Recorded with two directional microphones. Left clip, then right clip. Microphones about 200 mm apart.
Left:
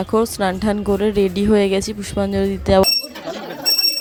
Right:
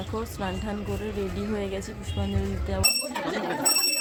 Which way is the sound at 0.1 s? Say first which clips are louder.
Left 15 dB; 45° left (ahead or behind).